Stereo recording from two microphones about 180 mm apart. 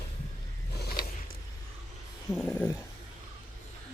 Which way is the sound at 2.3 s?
5° left (ahead or behind).